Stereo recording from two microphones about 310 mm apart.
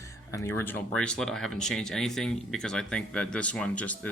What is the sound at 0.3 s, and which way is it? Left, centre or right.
Speech, centre.